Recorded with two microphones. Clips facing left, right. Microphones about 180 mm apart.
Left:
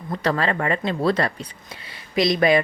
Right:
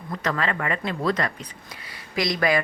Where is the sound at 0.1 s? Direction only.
30° left (ahead or behind).